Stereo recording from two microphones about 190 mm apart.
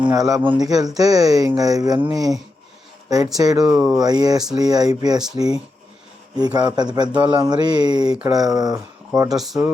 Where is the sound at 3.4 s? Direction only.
20° right (ahead or behind).